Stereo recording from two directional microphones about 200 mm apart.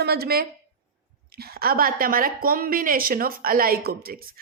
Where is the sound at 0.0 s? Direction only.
50° right (ahead or behind).